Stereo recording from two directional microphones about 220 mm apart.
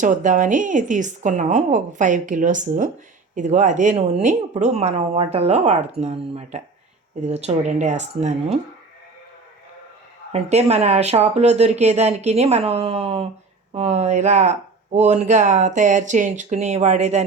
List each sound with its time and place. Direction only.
0.0 s a woman's voice: 35° right (ahead or behind)
10.3 s a woman's voice: 30° right (ahead or behind)